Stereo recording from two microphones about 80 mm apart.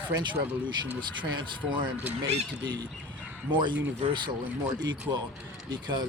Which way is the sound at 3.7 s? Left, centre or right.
Right.